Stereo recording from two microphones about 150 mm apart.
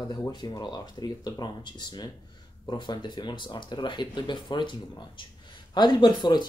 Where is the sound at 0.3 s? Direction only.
30° left (ahead or behind).